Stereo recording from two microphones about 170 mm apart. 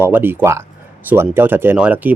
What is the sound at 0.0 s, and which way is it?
Speech, 10° right (ahead or behind).